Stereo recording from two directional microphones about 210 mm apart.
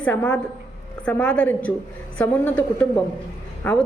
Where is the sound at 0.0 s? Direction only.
5° left (ahead or behind).